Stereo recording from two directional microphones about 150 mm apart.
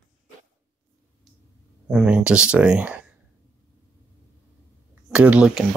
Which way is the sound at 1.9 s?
5° right (ahead or behind).